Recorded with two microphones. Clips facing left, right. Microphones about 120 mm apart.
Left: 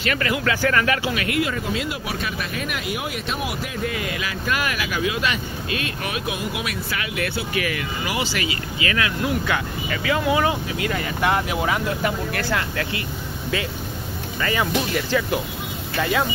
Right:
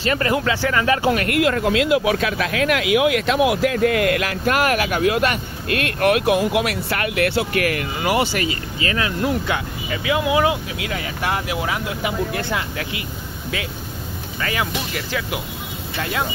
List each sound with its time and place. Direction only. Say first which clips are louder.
0.0 s speech: right 4 dB; 30° right (ahead or behind)
0.4 s speech: right 1 dB; 20° right (ahead or behind)
1.0 s speech: right 5 dB; 50° right (ahead or behind)
1.4 s speech: right 7 dB; 75° right (ahead or behind); by 9.4 s 30° right (ahead or behind)
9.5 s speech: even; 15° right (ahead or behind)
12.3 s speech: even; 20° right (ahead or behind)
14.4 s speech: left 2 dB; 5° right (ahead or behind)